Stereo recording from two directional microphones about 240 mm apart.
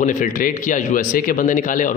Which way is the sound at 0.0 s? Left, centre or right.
Left.